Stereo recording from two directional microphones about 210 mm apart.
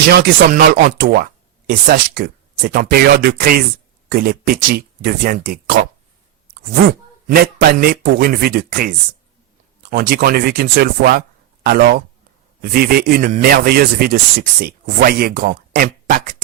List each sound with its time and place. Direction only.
0.1 s speech: 45° right (ahead or behind)
7.3 s speech: 45° right (ahead or behind)